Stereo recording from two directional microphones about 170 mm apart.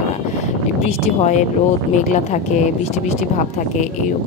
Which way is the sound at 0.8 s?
40° left (ahead or behind).